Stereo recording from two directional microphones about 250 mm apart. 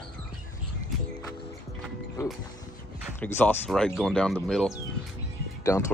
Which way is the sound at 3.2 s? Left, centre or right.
Centre.